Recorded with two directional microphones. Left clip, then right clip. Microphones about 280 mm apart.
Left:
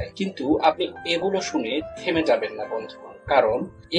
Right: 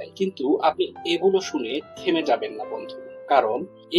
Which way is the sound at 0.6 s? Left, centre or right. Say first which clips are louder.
Left 4 dB; right.